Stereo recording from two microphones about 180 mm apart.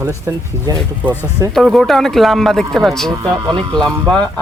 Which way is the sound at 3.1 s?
20° right (ahead or behind).